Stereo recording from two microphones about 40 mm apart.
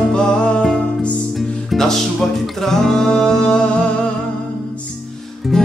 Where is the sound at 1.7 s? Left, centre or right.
Centre.